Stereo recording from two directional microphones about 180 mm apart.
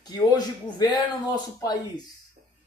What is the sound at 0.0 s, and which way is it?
Speech, 20° left (ahead or behind).